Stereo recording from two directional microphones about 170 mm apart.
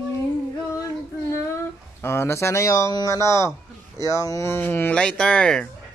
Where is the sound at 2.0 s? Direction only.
15° left (ahead or behind).